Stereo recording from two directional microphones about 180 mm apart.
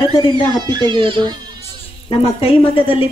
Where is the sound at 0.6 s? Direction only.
25° right (ahead or behind).